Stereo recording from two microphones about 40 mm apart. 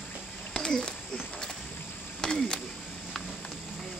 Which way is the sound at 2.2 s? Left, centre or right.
Centre.